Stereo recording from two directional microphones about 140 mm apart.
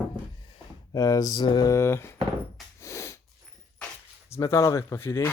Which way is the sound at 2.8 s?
20° left (ahead or behind).